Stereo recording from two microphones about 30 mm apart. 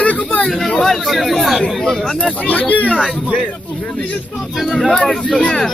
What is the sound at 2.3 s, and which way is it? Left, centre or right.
Speech, left.